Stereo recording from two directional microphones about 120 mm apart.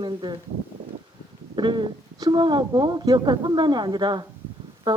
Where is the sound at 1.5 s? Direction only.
40° right (ahead or behind).